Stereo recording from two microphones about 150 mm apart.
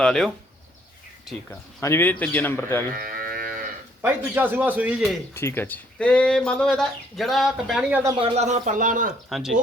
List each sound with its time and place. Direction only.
0.0 s speech: 5° left (ahead or behind)
1.8 s speech: 15° left (ahead or behind)
2.9 s cattle: 80° right
4.0 s a man's voice: 10° right (ahead or behind)
5.3 s speech: 15° left (ahead or behind); by 8.0 s 5° right (ahead or behind)
8.2 s speech: 50° right (ahead or behind)
9.3 s speech: centre (ahead or behind)